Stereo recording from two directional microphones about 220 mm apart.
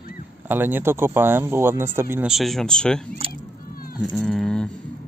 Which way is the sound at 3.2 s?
25° right (ahead or behind).